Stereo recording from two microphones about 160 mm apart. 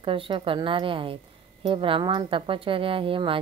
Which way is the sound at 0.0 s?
35° right (ahead or behind).